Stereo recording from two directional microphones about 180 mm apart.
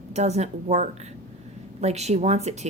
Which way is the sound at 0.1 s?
40° right (ahead or behind).